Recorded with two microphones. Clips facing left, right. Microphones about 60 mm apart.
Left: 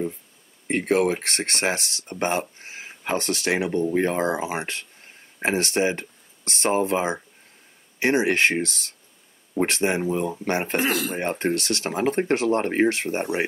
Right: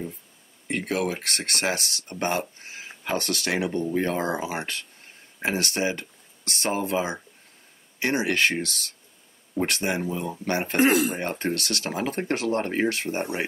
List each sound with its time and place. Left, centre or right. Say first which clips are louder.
0.7 s speech: left 6 dB; left
10.8 s speech: right 4 dB; right
11.1 s speech: left 3 dB; left